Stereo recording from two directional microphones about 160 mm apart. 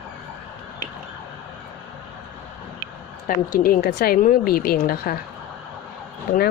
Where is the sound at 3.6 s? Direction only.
65° left (ahead or behind).